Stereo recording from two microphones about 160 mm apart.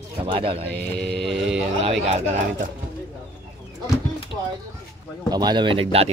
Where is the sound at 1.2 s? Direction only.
Centre (ahead or behind).